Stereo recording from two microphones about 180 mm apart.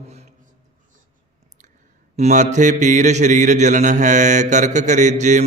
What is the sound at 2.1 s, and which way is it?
Mantra, 40° right (ahead or behind).